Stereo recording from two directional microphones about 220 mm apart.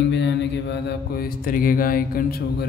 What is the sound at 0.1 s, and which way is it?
Mantra, 50° left (ahead or behind).